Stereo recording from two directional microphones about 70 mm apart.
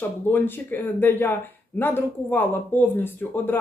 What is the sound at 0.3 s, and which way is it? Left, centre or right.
Speech, left.